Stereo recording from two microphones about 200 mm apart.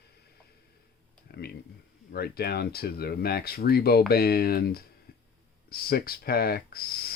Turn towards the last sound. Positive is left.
turn(degrees=50)  # may be behind; listen again after turning